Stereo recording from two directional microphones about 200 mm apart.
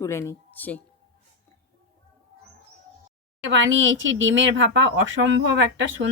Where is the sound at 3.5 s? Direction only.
70° right (ahead or behind).